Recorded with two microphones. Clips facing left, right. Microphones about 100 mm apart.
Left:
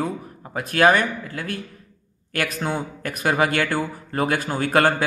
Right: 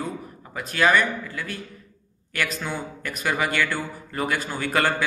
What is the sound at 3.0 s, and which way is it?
Speech, 45° left (ahead or behind).